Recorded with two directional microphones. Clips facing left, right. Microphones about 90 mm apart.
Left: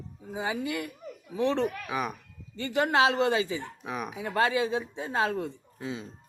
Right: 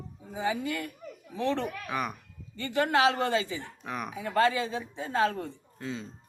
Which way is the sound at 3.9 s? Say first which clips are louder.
Left 1 dB; 5° left (ahead or behind).